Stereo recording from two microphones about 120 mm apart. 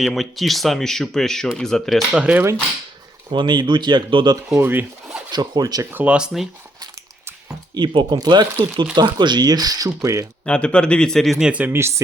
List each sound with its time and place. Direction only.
0.0 s speech: centre (ahead or behind)
3.3 s speech: 40° right (ahead or behind)
4.5 s speech: 15° right (ahead or behind)
5.3 s speech: 35° right (ahead or behind)
5.8 s speech: 15° right (ahead or behind)
7.8 s speech: 35° right (ahead or behind)
10.4 s speech: 10° left (ahead or behind); by 11.9 s 20° right (ahead or behind)